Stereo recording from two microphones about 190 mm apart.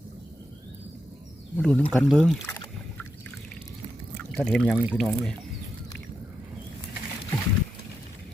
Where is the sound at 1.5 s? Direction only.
5° left (ahead or behind).